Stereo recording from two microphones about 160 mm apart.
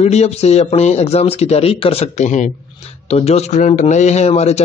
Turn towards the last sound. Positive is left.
turn(degrees=40)  # may be behind; listen again after turning